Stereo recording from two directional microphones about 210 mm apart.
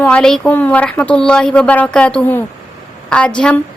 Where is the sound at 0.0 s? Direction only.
5° left (ahead or behind).